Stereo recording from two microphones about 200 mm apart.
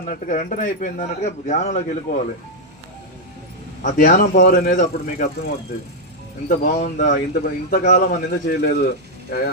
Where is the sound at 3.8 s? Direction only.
45° left (ahead or behind).